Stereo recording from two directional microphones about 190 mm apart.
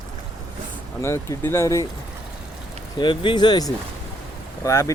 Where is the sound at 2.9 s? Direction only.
25° left (ahead or behind).